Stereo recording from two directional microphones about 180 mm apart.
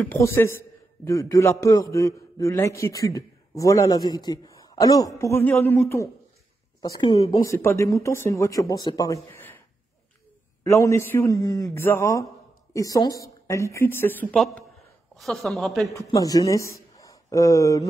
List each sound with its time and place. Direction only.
0.0 s a man's voice: 15° left (ahead or behind)
10.6 s a man's voice: 15° left (ahead or behind); by 16.0 s centre (ahead or behind)
16.1 s speech: 20° left (ahead or behind)